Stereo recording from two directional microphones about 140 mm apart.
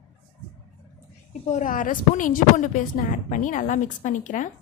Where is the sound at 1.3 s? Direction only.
60° left (ahead or behind).